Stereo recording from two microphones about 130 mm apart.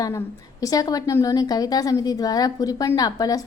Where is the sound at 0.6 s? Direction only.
30° left (ahead or behind).